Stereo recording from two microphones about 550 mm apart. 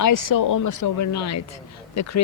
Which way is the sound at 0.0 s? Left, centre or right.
Left.